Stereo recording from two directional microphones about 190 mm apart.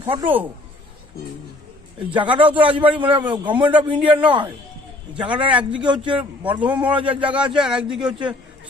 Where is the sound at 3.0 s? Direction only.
10° right (ahead or behind).